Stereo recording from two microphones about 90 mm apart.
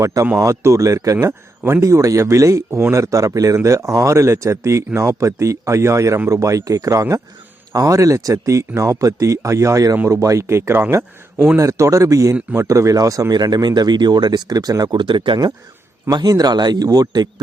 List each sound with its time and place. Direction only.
0.0 s speech: 35° right (ahead or behind)
11.5 s speech: 35° right (ahead or behind)
14.9 s speech: 65° right (ahead or behind)
16.3 s speech: 50° right (ahead or behind)